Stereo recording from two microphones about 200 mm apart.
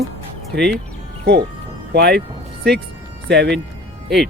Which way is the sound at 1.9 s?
55° right (ahead or behind).